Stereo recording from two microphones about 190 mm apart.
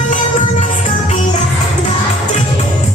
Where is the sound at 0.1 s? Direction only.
40° left (ahead or behind).